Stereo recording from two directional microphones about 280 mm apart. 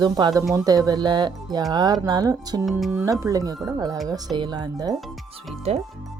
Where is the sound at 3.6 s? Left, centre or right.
Centre.